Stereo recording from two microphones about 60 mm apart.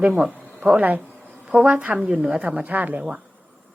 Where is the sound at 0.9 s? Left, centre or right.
Right.